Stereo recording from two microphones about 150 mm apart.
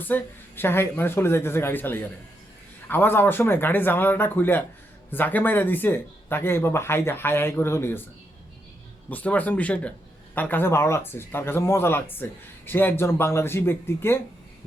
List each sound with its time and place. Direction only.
0.0 s speech: 15° left (ahead or behind)
9.0 s speech: 10° left (ahead or behind)